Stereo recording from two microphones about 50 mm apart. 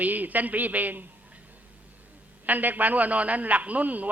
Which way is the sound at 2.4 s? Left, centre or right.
Right.